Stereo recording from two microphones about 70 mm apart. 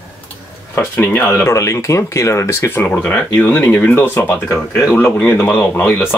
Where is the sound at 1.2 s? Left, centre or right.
Left.